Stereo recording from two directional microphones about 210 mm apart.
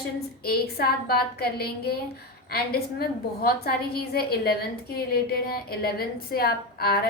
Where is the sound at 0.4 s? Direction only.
50° left (ahead or behind).